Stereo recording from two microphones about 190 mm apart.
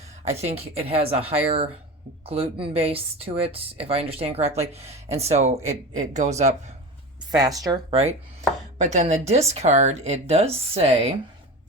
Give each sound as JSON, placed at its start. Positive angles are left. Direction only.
{"t": 0.3, "sound": "speech", "side_deg": -35}
{"t": 2.2, "sound": "speech", "side_deg": -30}
{"t": 7.3, "sound": "speech", "side_deg": -20}
{"t": 8.8, "sound": "speech", "side_deg": -40}